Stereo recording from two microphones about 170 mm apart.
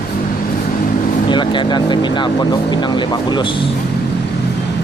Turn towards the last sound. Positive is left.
turn(degrees=30)  # may be behind; listen again after turning